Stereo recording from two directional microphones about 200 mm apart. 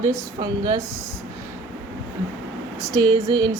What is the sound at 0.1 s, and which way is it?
Speech, 20° right (ahead or behind).